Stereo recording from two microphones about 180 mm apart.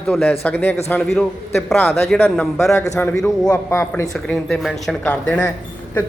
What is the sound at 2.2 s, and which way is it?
Speech, centre (ahead or behind).